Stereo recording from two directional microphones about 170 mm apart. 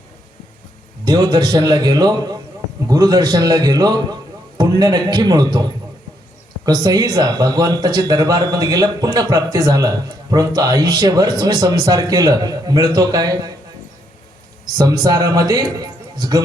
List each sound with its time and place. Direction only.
1.0 s a man's voice: 20° right (ahead or behind)
14.8 s speech: 20° right (ahead or behind)